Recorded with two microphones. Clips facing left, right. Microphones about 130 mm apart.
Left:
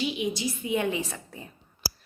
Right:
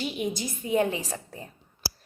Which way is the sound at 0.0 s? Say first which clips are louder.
Left 2 dB; 45° right (ahead or behind).